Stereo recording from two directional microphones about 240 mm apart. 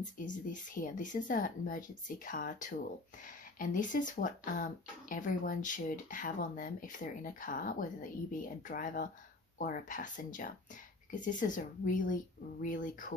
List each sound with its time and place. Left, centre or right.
0.0 s speech: left